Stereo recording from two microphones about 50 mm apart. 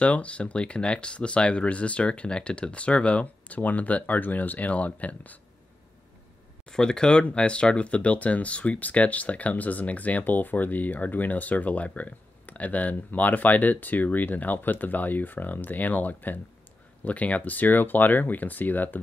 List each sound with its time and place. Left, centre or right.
0.0 s speech: left
6.7 s speech: centre; by 18.9 s left